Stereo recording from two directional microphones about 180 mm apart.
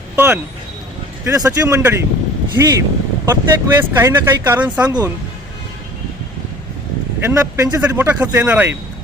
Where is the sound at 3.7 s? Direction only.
15° right (ahead or behind).